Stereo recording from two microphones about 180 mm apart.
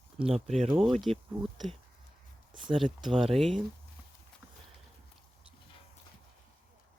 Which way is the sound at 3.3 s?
Centre (ahead or behind).